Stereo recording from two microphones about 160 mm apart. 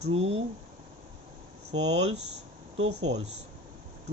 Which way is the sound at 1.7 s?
45° right (ahead or behind).